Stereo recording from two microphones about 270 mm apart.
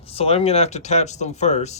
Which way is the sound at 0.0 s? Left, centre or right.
Left.